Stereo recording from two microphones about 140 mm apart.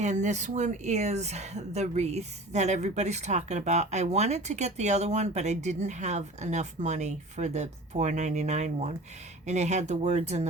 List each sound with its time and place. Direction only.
0.0 s speech: 55° right (ahead or behind)